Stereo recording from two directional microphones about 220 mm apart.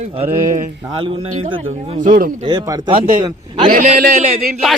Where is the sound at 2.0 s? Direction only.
40° right (ahead or behind).